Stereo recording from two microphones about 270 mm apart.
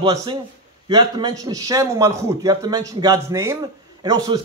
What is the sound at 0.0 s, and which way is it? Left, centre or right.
A man's voice, centre.